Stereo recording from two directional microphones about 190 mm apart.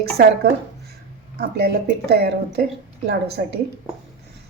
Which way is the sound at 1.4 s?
60° right (ahead or behind).